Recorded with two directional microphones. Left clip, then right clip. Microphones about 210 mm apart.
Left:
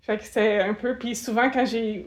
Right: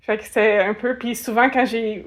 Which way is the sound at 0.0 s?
25° right (ahead or behind).